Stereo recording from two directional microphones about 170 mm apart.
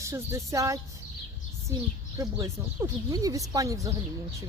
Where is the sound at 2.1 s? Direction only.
20° right (ahead or behind).